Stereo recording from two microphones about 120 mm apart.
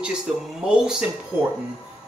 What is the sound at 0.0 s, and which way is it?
Speech, 5° right (ahead or behind).